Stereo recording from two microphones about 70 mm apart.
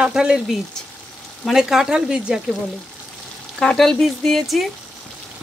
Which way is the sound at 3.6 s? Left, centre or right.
Centre.